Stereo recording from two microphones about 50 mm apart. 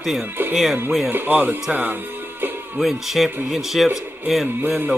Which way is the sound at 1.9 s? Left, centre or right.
Right.